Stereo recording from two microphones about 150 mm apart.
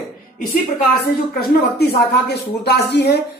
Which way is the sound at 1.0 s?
90° left.